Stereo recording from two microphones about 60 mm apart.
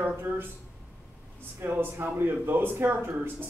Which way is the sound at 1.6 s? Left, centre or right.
Right.